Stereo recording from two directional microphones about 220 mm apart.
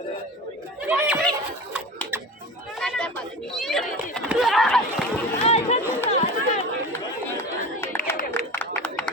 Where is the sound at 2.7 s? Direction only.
5° left (ahead or behind).